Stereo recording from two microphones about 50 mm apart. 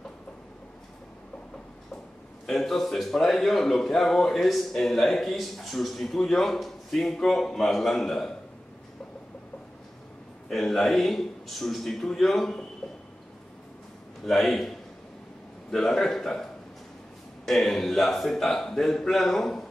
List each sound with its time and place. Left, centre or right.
2.4 s a man's voice: centre
10.5 s a man's voice: centre
12.8 s a sound: centre
14.2 s a man's voice: centre
17.5 s a man's voice: centre